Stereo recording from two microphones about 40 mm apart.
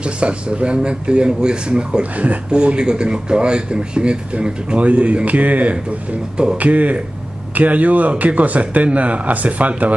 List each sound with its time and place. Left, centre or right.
0.0 s speech: right
4.7 s speech: right
6.3 s speech: right
6.6 s speech: right